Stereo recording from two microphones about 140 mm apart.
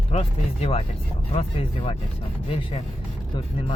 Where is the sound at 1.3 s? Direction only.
45° left (ahead or behind).